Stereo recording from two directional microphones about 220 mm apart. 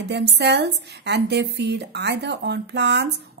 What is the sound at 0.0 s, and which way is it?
Speech, 50° right (ahead or behind).